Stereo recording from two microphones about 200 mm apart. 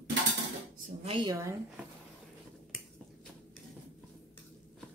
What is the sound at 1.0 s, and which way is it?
Speech, 25° right (ahead or behind).